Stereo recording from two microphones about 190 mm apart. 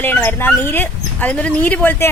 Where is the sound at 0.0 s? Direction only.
10° left (ahead or behind).